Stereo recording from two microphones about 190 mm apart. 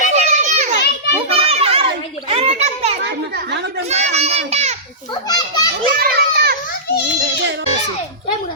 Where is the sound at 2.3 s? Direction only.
35° right (ahead or behind).